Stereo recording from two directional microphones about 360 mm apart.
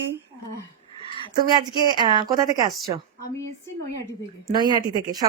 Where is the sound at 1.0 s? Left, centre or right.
Centre.